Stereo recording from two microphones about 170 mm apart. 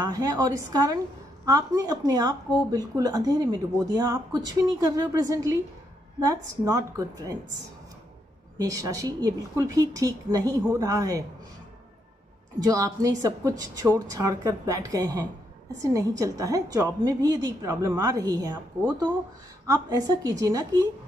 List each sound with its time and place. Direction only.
0.0 s speech: 20° right (ahead or behind)
8.5 s speech: 20° right (ahead or behind)
12.6 s speech: 20° right (ahead or behind)